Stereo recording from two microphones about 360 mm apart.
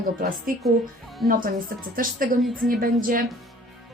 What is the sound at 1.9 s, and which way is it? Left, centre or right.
Speech, right.